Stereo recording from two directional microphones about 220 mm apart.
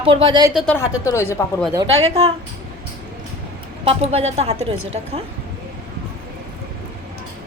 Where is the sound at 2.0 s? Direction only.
30° right (ahead or behind).